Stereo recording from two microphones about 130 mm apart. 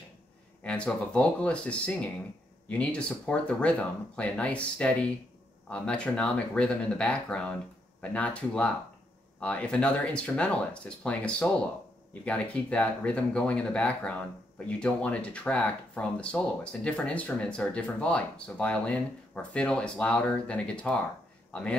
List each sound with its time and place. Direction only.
0.7 s speech: 10° left (ahead or behind)